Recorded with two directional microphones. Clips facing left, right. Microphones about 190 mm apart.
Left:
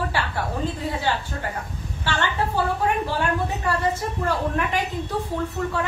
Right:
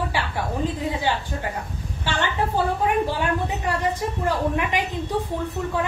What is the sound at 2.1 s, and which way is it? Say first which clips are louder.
Speech: even; 15° right (ahead or behind).